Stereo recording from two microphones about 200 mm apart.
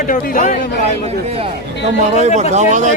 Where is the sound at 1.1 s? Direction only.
30° right (ahead or behind).